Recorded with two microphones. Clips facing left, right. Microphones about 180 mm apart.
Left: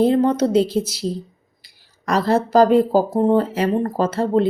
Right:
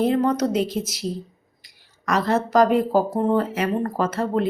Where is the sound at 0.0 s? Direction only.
30° left (ahead or behind).